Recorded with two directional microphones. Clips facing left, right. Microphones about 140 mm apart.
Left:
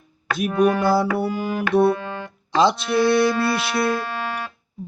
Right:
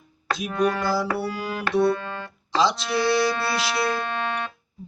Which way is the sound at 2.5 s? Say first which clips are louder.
Left 4 dB; 55° left (ahead or behind).